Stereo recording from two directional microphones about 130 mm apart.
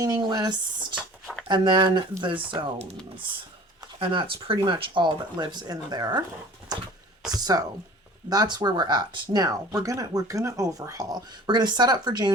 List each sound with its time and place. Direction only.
0.0 s speech: 30° right (ahead or behind)
4.0 s speech: 40° right (ahead or behind)
7.3 s speech: 30° right (ahead or behind)